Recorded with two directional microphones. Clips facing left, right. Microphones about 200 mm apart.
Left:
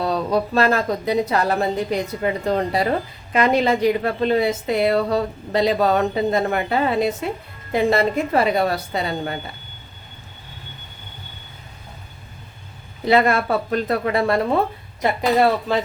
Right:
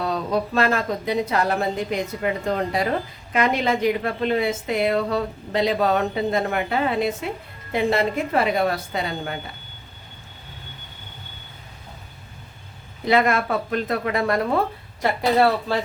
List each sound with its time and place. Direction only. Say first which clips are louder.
0.0 s a woman's voice: left 3 dB; 35° left (ahead or behind)
3.3 s a woman's voice: left 3 dB; 35° left (ahead or behind)
13.1 s a woman's voice: left 2 dB; 35° left (ahead or behind); by 15.8 s 20° left (ahead or behind)